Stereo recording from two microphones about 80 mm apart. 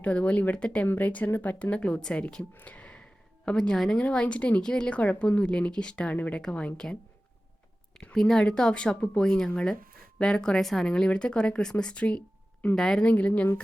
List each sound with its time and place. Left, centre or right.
0.0 s speech: centre
2.6 s a sound: centre
4.0 s speech: centre
8.1 s speech: centre